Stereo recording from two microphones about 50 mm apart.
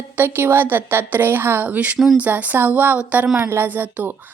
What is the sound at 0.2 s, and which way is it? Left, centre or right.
A woman's voice, right.